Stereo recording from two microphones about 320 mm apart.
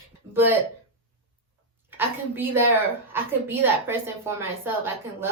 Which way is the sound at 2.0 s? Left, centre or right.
Centre.